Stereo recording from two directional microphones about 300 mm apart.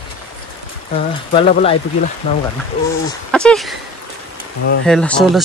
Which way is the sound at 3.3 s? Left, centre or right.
Centre.